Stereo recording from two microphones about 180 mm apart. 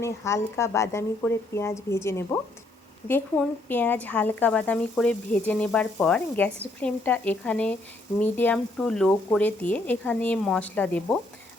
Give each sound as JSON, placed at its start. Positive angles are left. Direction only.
{"t": 0.0, "sound": "speech", "side_deg": 15}